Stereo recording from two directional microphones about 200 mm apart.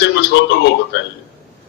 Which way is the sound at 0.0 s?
55° left (ahead or behind).